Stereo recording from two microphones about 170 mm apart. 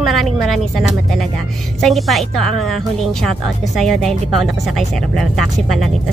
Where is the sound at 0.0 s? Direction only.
Centre (ahead or behind).